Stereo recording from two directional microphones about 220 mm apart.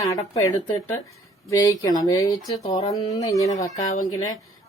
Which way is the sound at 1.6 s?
15° left (ahead or behind).